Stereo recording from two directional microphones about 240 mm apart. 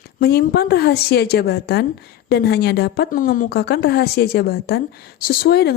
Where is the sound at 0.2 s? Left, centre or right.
Left.